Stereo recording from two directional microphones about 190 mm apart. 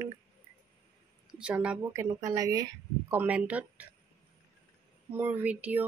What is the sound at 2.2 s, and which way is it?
Speech, 15° right (ahead or behind).